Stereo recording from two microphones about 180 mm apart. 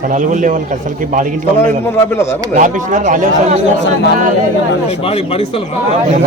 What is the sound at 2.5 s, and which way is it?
A man's voice, 45° right (ahead or behind).